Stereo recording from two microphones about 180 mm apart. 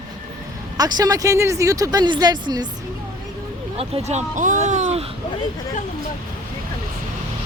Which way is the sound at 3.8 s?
40° right (ahead or behind).